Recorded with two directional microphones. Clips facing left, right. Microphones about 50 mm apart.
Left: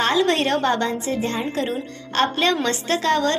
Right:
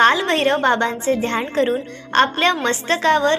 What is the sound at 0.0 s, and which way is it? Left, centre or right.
A woman's voice, right.